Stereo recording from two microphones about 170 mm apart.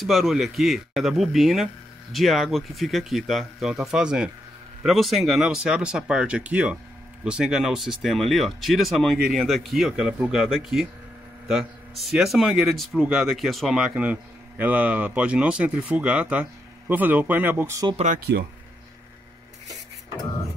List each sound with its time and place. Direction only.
0.0 s speech: centre (ahead or behind); by 17.9 s 15° right (ahead or behind)
17.9 s speech: 45° right (ahead or behind)